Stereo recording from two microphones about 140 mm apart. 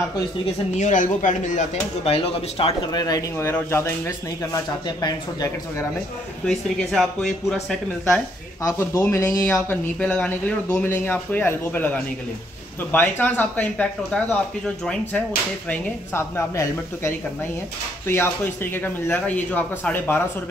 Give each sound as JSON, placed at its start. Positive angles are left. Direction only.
{"t": 0.7, "sound": "speech", "side_deg": 65}
{"t": 2.0, "sound": "speech", "side_deg": 40}
{"t": 2.9, "sound": "speech", "side_deg": 30}
{"t": 6.4, "sound": "speech", "side_deg": 0}
{"t": 8.6, "sound": "speech", "side_deg": 20}
{"t": 9.9, "sound": "speech", "side_deg": 10}
{"t": 15.7, "sound": "speech", "side_deg": 15}